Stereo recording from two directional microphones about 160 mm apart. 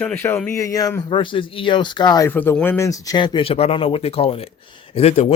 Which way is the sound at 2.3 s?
10° left (ahead or behind).